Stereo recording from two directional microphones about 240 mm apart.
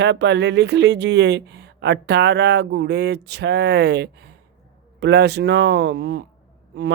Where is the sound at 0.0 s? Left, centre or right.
Right.